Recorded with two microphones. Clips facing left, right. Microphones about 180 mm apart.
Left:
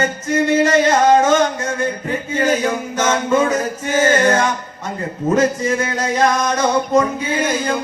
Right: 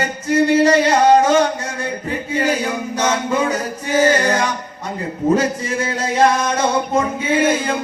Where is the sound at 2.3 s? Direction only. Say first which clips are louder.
Left 2 dB; 35° right (ahead or behind).